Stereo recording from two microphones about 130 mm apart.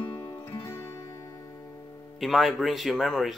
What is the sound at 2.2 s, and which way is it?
Speech, centre (ahead or behind).